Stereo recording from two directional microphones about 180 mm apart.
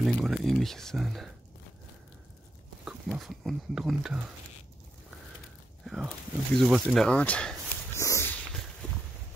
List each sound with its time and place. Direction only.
0.0 s speech: centre (ahead or behind)
2.8 s speech: 5° right (ahead or behind)
5.9 s speech: centre (ahead or behind)
8.8 s a sound: 5° left (ahead or behind)